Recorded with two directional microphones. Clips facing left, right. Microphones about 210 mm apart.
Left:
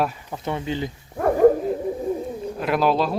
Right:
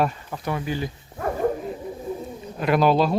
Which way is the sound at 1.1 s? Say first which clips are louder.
Left 9 dB; 55° left (ahead or behind).